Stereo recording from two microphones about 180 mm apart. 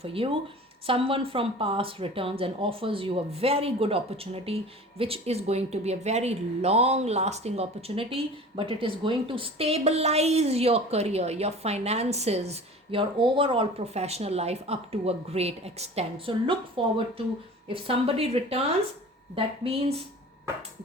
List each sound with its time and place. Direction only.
0.0 s speech: 30° right (ahead or behind)